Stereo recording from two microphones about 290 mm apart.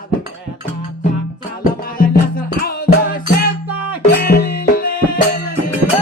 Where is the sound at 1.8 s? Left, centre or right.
Left.